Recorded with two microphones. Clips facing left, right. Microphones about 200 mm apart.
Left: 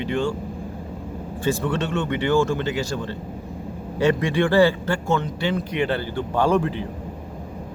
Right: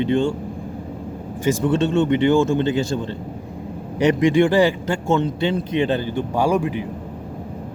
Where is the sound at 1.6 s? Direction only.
20° right (ahead or behind).